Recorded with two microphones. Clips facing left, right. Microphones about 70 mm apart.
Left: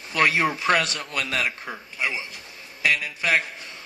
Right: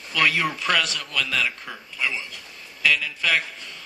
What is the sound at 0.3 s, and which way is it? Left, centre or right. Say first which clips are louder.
Speech: left 1 dB; left.